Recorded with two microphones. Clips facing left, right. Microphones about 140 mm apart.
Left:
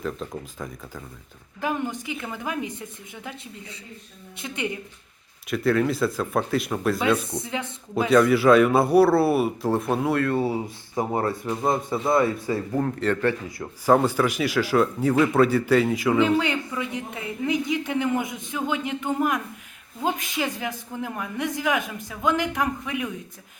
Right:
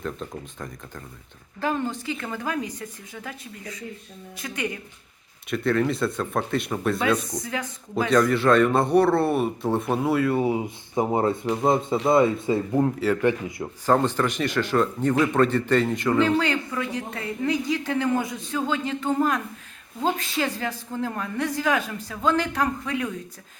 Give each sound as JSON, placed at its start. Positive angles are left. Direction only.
{"t": 0.0, "sound": "speech", "side_deg": 0}
{"t": 1.6, "sound": "speech", "side_deg": 15}
{"t": 4.4, "sound": "speech", "side_deg": 25}
{"t": 5.5, "sound": "speech", "side_deg": 0}
{"t": 7.3, "sound": "speech", "side_deg": 25}
{"t": 8.0, "sound": "speech", "side_deg": 5}
{"t": 10.4, "sound": "speech", "side_deg": -15}
{"t": 13.8, "sound": "speech", "side_deg": 10}
{"t": 16.2, "sound": "speech", "side_deg": 15}